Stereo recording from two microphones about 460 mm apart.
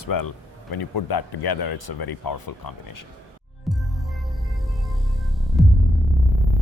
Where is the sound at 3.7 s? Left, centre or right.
Centre.